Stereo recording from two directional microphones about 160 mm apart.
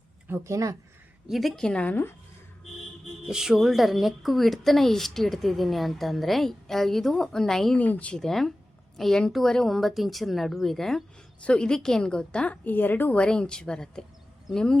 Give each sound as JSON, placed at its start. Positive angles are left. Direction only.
{"t": 0.3, "sound": "speech", "side_deg": -15}
{"t": 1.3, "sound": "speech", "side_deg": 0}
{"t": 3.2, "sound": "speech", "side_deg": -5}